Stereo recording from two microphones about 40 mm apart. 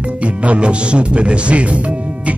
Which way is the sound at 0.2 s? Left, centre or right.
Right.